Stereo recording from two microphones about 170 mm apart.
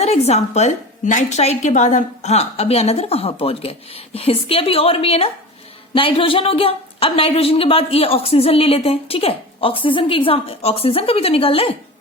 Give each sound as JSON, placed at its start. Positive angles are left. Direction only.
{"t": 0.0, "sound": "a woman's voice", "side_deg": 40}